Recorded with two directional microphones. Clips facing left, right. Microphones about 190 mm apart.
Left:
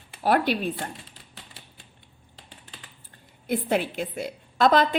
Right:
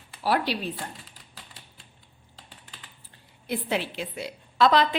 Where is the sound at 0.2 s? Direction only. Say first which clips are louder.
Left 3 dB; 50° left (ahead or behind).